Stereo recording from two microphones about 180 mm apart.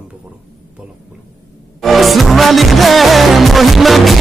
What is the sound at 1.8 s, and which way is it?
Music, centre (ahead or behind).